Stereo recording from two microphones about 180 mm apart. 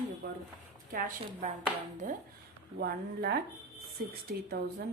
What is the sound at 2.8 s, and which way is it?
Speech, 60° right (ahead or behind).